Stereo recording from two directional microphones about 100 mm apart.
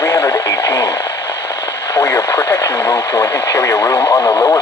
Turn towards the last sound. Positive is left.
turn(degrees=25)  # may be behind; listen again after turning